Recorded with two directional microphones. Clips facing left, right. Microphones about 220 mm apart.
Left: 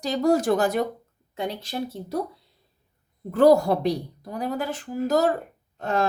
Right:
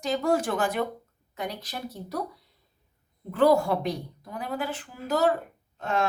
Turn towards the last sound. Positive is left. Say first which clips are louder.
# left 3 dB
turn(degrees=35)  # may be behind; listen again after turning